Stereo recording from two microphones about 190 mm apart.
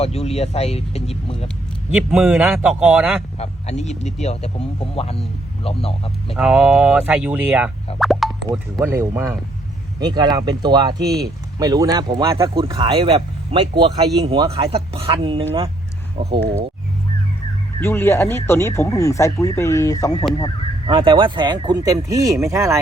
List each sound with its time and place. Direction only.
0.0 s speech: 35° left (ahead or behind)
1.9 s speech: 5° right (ahead or behind)
3.3 s speech: 35° left (ahead or behind)
6.3 s speech: centre (ahead or behind)
7.9 s a sound: centre (ahead or behind)
8.8 s speech: 15° right (ahead or behind)
17.7 s speech: 10° left (ahead or behind)
20.8 s speech: 25° right (ahead or behind)